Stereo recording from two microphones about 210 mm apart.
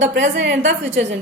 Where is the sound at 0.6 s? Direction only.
35° right (ahead or behind).